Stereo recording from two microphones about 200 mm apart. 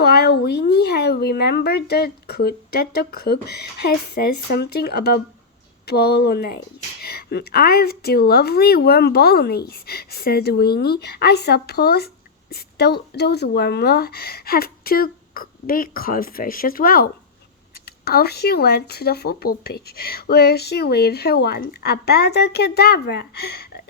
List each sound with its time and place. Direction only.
0.0 s a woman's voice: 55° left (ahead or behind)